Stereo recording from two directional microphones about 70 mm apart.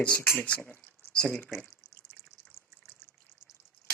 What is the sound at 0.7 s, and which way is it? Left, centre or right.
Drip, centre.